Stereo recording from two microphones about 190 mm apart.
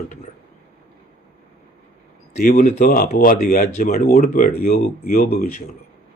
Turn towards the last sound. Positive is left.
turn(degrees=50)  # may be behind; listen again after turning